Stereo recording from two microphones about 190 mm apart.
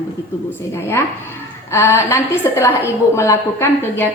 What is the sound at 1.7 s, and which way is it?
A woman's voice, 15° left (ahead or behind).